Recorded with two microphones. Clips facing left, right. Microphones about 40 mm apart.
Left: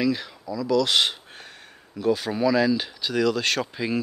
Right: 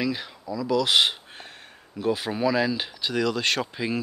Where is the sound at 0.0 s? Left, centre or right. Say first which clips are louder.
Left 3 dB; centre.